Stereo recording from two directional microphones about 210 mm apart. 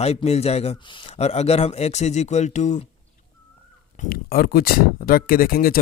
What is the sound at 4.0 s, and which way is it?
Speech, 45° left (ahead or behind).